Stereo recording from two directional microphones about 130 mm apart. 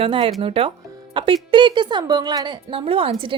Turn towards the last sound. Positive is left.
turn(degrees=-45)  # may be behind; listen again after turning